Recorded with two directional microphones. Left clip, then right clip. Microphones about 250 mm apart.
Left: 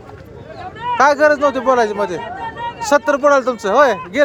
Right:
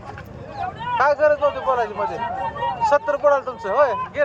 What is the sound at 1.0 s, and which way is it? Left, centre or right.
Speech, left.